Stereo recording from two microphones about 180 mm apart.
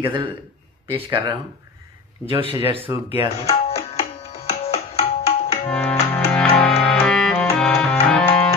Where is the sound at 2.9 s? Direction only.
15° right (ahead or behind).